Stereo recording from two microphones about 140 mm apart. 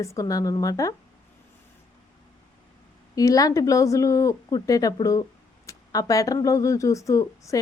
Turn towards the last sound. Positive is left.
turn(degrees=20)  # may be behind; listen again after turning